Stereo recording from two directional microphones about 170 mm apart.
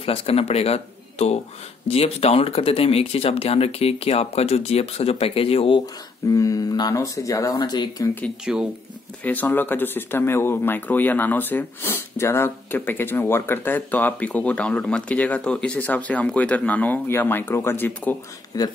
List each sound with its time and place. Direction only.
0.0 s speech: 35° left (ahead or behind)
6.3 s speech: 20° left (ahead or behind)
8.5 s speech: 5° right (ahead or behind)
9.2 s speech: 10° left (ahead or behind)